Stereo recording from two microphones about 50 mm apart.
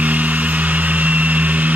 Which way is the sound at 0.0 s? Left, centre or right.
Right.